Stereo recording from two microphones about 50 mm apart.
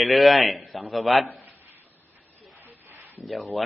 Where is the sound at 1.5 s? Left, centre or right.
Right.